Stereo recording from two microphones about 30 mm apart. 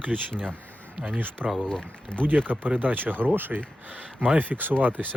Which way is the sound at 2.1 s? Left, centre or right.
Left.